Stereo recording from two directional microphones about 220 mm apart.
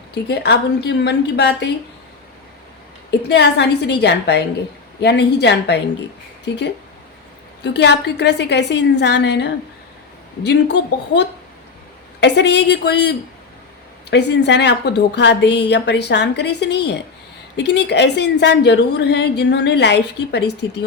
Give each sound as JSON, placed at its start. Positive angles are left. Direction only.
{"t": 0.1, "sound": "a woman's voice", "side_deg": 50}
{"t": 3.1, "sound": "a woman's voice", "side_deg": 50}
{"t": 7.6, "sound": "a woman's voice", "side_deg": 50}